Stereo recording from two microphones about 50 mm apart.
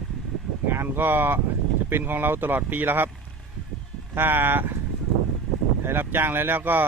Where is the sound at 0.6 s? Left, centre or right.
Right.